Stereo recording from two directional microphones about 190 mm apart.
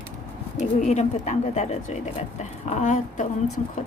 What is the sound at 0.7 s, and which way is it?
A woman's voice, 35° left (ahead or behind).